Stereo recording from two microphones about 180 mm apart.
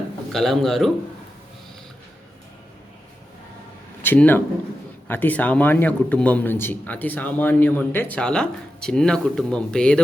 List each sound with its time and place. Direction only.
0.3 s a man's voice: centre (ahead or behind)
4.0 s a man's voice: 10° left (ahead or behind)